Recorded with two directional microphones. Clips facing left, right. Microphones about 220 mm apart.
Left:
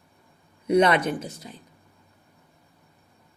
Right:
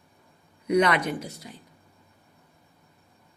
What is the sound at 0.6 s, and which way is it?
Speech, 25° left (ahead or behind).